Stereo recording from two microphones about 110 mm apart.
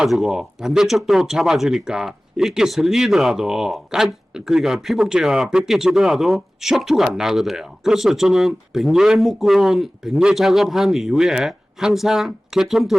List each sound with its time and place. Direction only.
0.0 s speech: centre (ahead or behind)